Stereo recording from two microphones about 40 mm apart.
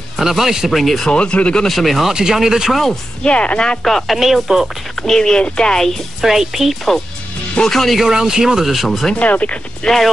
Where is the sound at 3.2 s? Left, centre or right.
Left.